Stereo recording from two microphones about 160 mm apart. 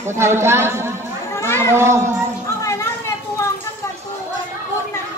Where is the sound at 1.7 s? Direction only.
15° right (ahead or behind).